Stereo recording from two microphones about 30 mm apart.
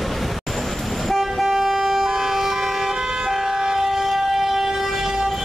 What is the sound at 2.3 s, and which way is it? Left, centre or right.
Vehicle, centre.